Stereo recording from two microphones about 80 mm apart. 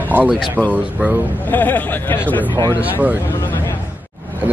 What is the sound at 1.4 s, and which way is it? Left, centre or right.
Speech, left.